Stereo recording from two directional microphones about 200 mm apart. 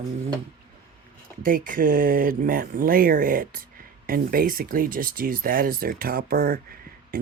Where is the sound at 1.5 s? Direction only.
45° right (ahead or behind).